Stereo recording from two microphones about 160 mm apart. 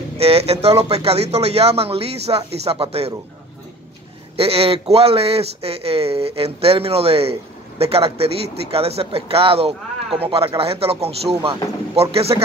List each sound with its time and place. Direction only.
0.2 s speech: 40° right (ahead or behind)
4.4 s speech: 40° right (ahead or behind)